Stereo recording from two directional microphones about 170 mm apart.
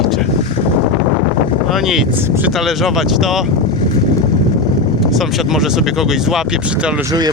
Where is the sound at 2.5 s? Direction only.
Centre (ahead or behind).